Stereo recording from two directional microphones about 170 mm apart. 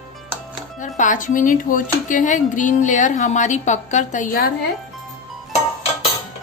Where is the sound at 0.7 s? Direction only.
45° left (ahead or behind).